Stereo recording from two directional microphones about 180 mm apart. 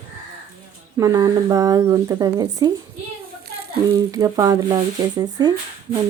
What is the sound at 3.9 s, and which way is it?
Speech, 20° right (ahead or behind).